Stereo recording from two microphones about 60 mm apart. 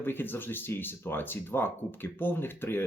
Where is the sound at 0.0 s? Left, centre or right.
Left.